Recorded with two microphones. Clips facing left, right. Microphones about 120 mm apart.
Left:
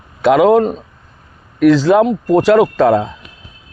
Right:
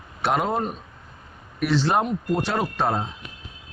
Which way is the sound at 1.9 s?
90° left.